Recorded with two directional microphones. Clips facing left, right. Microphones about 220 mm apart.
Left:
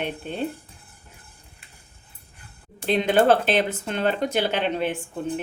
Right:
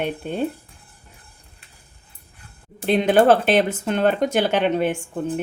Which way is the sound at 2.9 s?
50° right (ahead or behind).